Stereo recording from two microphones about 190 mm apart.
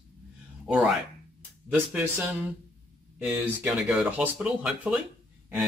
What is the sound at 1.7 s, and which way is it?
Speech, 5° right (ahead or behind).